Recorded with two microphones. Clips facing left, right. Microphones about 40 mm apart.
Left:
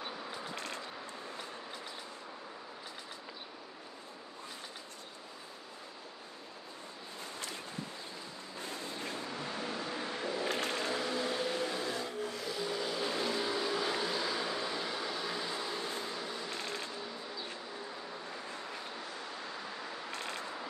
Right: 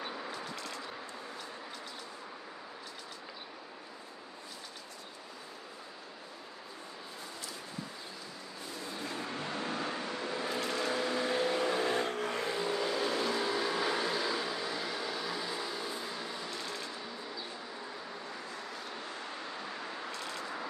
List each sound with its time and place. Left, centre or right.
0.6 s vehicle: left
9.2 s vehicle: right
13.4 s vehicle: centre
15.9 s a sound: centre
16.4 s a sound: left
20.1 s vehicle: left